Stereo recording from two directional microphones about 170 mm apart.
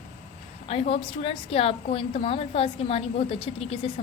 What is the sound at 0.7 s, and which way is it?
A woman's voice, 35° left (ahead or behind).